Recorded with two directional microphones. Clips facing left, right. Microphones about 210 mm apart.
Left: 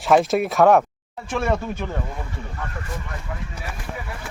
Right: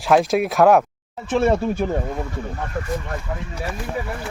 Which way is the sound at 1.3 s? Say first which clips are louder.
Right 5 dB; 30° right (ahead or behind).